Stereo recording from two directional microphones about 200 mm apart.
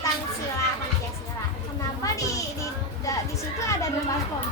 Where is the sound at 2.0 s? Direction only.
15° left (ahead or behind).